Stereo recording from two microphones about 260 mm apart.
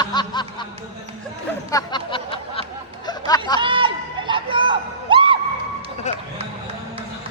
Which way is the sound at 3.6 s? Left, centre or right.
Centre.